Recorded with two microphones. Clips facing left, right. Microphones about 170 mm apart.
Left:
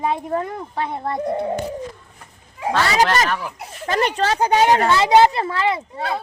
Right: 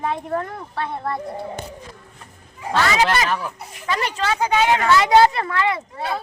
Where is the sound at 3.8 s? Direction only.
50° left (ahead or behind).